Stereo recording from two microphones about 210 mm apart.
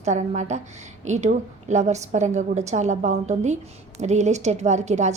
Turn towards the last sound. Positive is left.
turn(degrees=-35)  # may be behind; listen again after turning